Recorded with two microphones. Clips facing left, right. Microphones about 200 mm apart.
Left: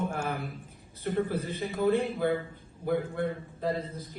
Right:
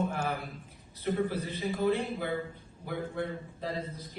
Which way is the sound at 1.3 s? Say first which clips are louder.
Left 1 dB; 55° left (ahead or behind).